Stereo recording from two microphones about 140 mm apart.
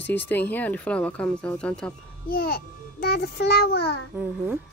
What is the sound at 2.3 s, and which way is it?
Speech, 90° left.